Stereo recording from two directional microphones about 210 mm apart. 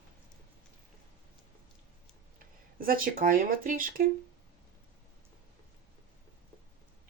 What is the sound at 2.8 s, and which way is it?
Speech, 45° right (ahead or behind).